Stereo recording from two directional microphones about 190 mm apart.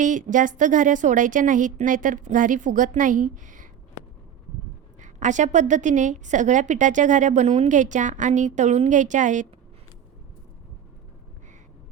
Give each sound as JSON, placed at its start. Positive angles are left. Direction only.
{"t": 0.0, "sound": "a woman's voice", "side_deg": -40}
{"t": 4.9, "sound": "a woman's voice", "side_deg": -40}